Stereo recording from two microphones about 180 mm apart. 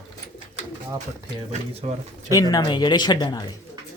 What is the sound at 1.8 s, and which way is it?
Speech, 40° right (ahead or behind).